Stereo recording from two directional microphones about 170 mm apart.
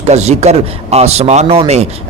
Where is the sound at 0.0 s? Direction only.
40° right (ahead or behind).